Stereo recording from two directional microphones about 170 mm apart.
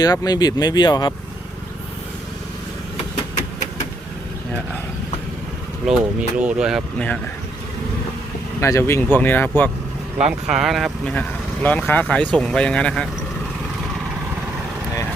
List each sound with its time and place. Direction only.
0.0 s speech: 25° left (ahead or behind)
5.8 s speech: 5° right (ahead or behind)
8.6 s speech: 15° left (ahead or behind)
10.2 s speech: 5° right (ahead or behind)